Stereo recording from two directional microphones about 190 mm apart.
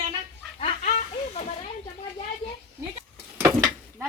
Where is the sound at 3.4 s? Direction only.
20° right (ahead or behind).